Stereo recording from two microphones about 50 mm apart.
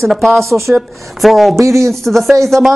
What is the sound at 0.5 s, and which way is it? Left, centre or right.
Speech, right.